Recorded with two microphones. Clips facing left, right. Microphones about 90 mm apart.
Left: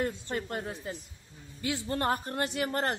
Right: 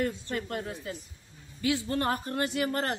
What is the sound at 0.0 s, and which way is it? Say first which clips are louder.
A woman's voice: right 1 dB; 30° left (ahead or behind).